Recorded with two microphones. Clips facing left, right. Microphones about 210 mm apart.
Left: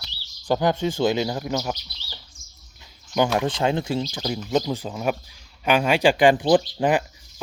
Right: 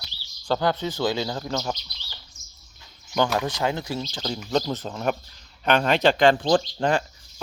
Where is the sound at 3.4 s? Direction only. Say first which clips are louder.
Left 3 dB; 25° left (ahead or behind).